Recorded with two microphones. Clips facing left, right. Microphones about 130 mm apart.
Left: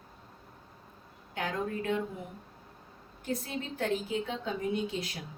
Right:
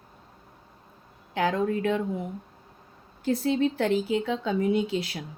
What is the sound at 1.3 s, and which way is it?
Speech, 90° right.